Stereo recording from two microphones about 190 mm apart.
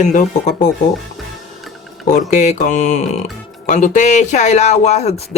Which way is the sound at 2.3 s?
40° left (ahead or behind).